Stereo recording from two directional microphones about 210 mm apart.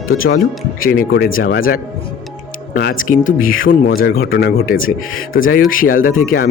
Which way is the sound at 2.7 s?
40° left (ahead or behind).